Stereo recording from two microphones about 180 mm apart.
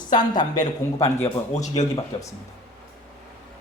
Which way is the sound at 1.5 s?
40° left (ahead or behind).